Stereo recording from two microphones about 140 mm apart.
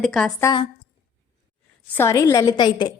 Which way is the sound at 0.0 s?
5° left (ahead or behind).